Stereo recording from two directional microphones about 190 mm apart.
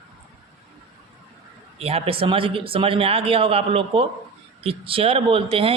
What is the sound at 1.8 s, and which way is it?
Speech, 30° right (ahead or behind).